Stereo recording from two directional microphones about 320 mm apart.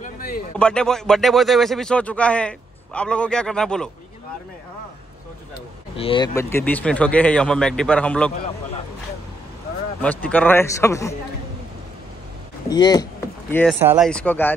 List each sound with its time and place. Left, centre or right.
0.0 s a sound: left
0.6 s speech: centre
5.9 s speech: centre
10.0 s a man's voice: centre
12.6 s speech: centre